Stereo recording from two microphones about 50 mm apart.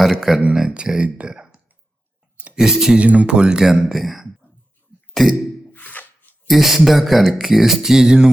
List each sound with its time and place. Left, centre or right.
0.0 s speech: centre
0.5 s speech: centre
3.0 s speech: right
3.8 s speech: centre
5.7 s a sound: left
6.5 s speech: centre